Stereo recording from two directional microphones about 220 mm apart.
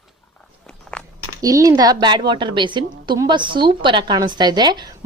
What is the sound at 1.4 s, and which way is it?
A woman's voice, 15° right (ahead or behind).